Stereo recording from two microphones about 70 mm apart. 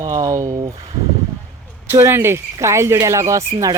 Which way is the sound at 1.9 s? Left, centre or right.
Right.